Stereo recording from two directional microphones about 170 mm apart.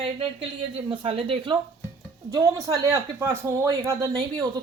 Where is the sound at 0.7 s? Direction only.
35° right (ahead or behind).